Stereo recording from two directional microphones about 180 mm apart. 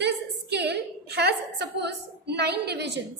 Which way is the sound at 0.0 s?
70° right (ahead or behind).